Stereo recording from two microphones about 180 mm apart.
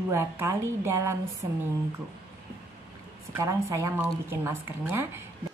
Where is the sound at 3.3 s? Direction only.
15° right (ahead or behind).